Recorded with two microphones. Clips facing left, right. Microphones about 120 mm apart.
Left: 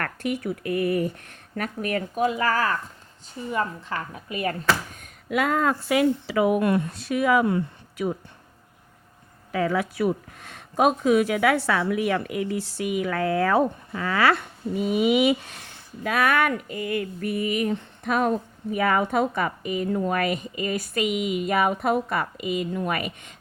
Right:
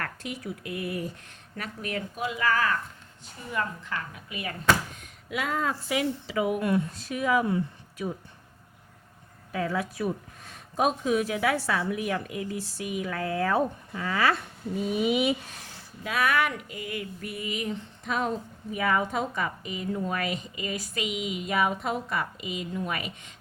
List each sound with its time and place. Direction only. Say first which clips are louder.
0.0 s a woman's voice: left 7 dB; 60° left (ahead or behind); by 3.9 s 30° left (ahead or behind)
3.9 s a woman's voice: left 8 dB; 40° left (ahead or behind); by 8.1 s 70° left (ahead or behind)
9.5 s speech: left 5 dB; 80° left
16.0 s speech: left 4 dB; 55° left (ahead or behind)